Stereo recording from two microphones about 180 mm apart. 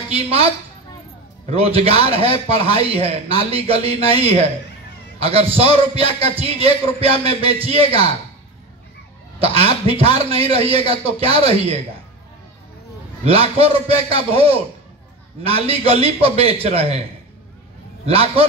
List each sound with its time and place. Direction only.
0.1 s a sound: 35° right (ahead or behind)
1.5 s a man's voice: 35° right (ahead or behind)
9.4 s a man's voice: 35° right (ahead or behind)
13.2 s a man's voice: 35° right (ahead or behind)
18.0 s a man's voice: 35° right (ahead or behind)